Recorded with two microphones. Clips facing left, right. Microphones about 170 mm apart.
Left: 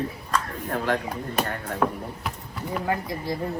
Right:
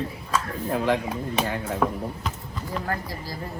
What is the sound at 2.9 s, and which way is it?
Speech, 20° left (ahead or behind).